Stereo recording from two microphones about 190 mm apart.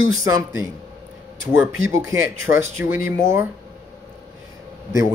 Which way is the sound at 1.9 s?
15° right (ahead or behind).